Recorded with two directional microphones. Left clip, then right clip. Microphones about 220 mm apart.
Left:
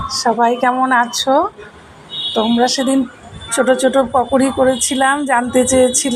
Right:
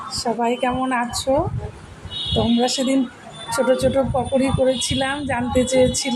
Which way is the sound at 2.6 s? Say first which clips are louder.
Left 5 dB; 10° left (ahead or behind).